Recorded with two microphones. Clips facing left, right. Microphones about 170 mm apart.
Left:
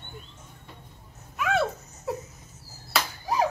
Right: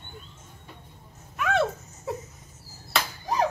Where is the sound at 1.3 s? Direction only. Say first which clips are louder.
Right 1 dB; centre (ahead or behind).